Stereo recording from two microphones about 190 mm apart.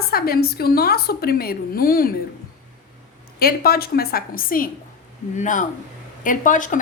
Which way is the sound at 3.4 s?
50° left (ahead or behind).